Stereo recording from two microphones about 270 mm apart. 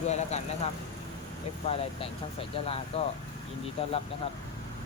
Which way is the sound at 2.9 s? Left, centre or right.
Left.